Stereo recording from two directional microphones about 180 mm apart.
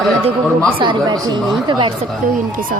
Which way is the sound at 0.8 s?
25° right (ahead or behind).